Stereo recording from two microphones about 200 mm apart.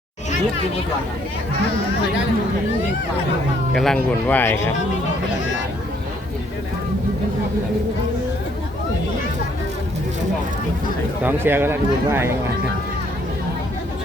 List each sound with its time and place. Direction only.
3.8 s speech: 5° left (ahead or behind)
11.2 s speech: 10° right (ahead or behind)